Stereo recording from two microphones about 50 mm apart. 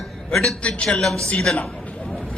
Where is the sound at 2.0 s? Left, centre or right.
Centre.